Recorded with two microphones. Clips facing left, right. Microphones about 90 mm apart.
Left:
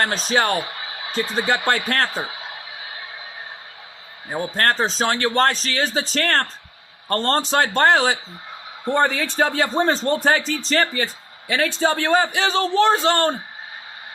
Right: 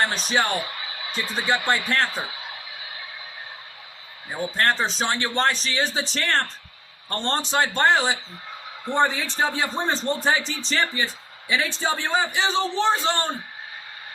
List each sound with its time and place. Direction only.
0.0 s speech: 40° left (ahead or behind)
4.4 s speech: 45° left (ahead or behind)
5.9 s speech: 55° left (ahead or behind)
8.9 s a man's voice: 60° left (ahead or behind)
10.2 s a man's voice: 50° left (ahead or behind)